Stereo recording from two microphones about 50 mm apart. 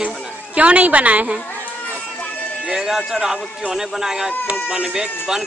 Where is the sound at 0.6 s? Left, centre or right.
Right.